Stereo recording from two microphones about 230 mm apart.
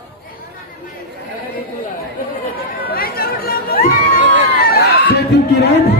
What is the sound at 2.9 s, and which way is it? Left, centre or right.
Chatter, left.